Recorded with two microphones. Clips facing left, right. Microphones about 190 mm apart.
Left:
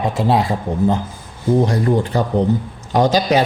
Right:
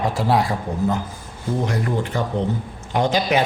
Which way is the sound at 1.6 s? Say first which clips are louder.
Left 6 dB; 35° left (ahead or behind).